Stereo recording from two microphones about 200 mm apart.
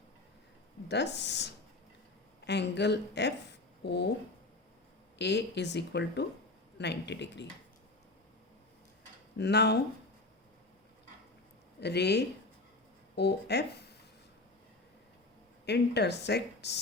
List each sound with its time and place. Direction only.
0.9 s speech: 60° left (ahead or behind)
5.1 s speech: 60° left (ahead or behind)
9.4 s speech: 55° left (ahead or behind)
11.8 s speech: 55° left (ahead or behind)
15.6 s speech: 55° left (ahead or behind)